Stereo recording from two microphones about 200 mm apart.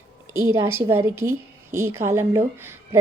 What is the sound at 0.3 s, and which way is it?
A woman's voice, 15° right (ahead or behind).